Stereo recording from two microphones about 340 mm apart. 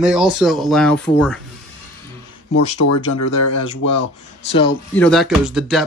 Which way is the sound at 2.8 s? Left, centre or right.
Left.